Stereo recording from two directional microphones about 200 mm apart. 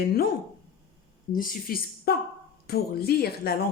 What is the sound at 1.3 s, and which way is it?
Speech, 45° left (ahead or behind).